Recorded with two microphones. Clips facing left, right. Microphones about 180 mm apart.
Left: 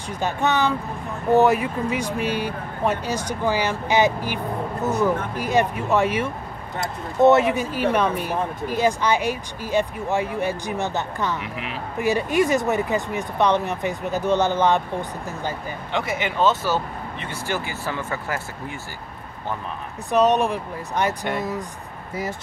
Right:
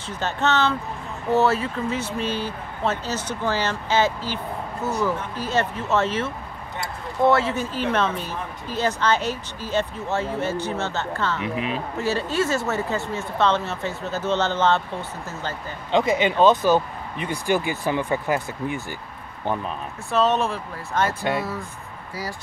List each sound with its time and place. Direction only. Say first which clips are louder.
0.1 s speech: left 1 dB; 15° left (ahead or behind)
11.4 s speech: right 5 dB; 20° right (ahead or behind)
12.0 s speech: left 4 dB; 15° left (ahead or behind)
15.9 s speech: right 6 dB; 20° right (ahead or behind)
20.1 s speech: left 3 dB; 15° left (ahead or behind)